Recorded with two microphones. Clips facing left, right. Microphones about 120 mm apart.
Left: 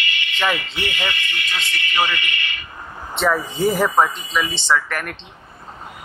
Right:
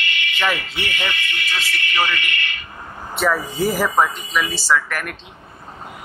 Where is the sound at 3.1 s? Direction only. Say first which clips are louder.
Even; centre (ahead or behind).